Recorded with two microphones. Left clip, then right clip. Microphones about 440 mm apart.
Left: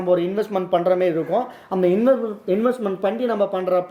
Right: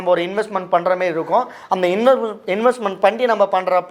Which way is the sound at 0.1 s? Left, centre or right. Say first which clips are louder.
Right 3 dB; right.